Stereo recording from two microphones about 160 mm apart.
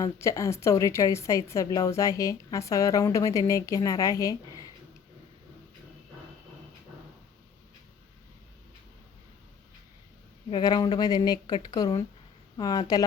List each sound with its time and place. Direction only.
0.0 s a woman's voice: 20° left (ahead or behind)
10.5 s a woman's voice: 25° left (ahead or behind)